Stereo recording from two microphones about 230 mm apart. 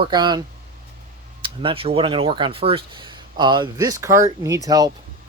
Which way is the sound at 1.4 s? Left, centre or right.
Right.